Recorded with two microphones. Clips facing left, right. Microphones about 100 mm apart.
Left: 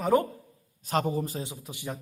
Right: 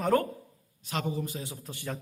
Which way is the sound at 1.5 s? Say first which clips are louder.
Left 1 dB; 15° left (ahead or behind).